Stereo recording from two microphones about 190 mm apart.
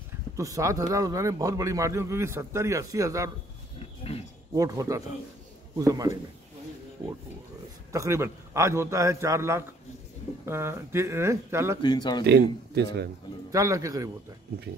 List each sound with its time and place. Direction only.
0.4 s a man's voice: 15° right (ahead or behind)
4.6 s a man's voice: 20° right (ahead or behind)
7.9 s a man's voice: 15° right (ahead or behind)
11.8 s speech: 20° left (ahead or behind)
12.3 s a man's voice: 60° right (ahead or behind)
13.5 s a man's voice: 20° right (ahead or behind)